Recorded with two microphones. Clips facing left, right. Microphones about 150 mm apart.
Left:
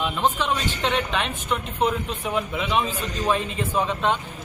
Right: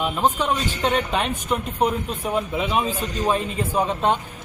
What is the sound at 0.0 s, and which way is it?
Speech, 10° right (ahead or behind).